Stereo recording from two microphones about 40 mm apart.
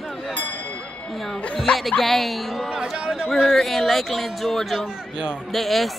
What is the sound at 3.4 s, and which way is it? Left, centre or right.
Speech, centre.